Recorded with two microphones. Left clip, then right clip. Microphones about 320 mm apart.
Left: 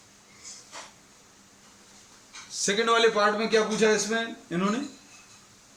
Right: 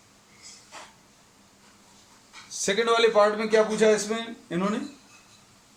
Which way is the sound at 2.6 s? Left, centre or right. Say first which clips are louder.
Right 1 dB; centre.